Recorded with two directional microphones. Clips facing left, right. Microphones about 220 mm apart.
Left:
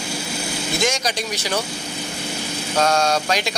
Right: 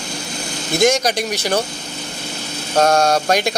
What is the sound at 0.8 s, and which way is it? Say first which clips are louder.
Speech: right 9 dB; 55° right (ahead or behind).